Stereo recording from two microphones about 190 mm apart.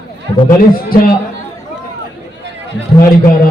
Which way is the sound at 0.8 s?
50° left (ahead or behind).